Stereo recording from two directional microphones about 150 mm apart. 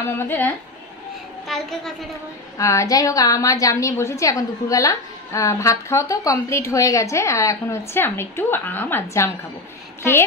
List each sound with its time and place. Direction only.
0.2 s a woman's voice: 10° left (ahead or behind)
1.5 s a child's voice: centre (ahead or behind)
2.5 s a woman's voice: 20° left (ahead or behind)